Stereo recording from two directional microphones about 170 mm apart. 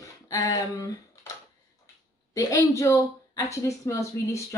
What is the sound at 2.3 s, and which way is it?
Speech, 20° left (ahead or behind).